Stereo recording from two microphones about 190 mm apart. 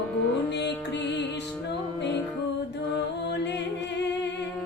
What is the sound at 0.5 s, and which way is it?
Music, 65° left (ahead or behind).